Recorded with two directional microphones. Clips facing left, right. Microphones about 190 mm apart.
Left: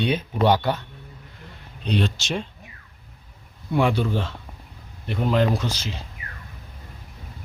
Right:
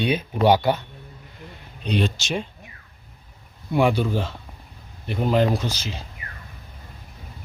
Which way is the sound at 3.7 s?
10° right (ahead or behind).